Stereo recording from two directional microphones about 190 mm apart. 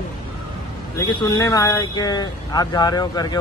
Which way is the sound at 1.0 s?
15° left (ahead or behind).